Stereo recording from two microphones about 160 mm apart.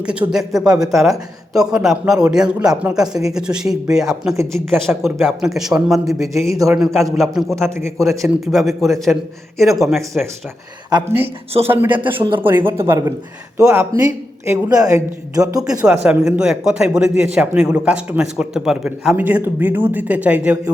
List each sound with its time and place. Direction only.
0.0 s a man's voice: 5° right (ahead or behind)
6.5 s a woman's voice: 20° right (ahead or behind)
6.7 s a man's voice: centre (ahead or behind)
7.8 s a woman's voice: 15° right (ahead or behind)
8.5 s a man's voice: centre (ahead or behind)
11.7 s a man's voice: 10° right (ahead or behind)
11.9 s a man's voice: 30° right (ahead or behind)
12.4 s a man's voice: 15° right (ahead or behind)
16.0 s a man's voice: 5° right (ahead or behind)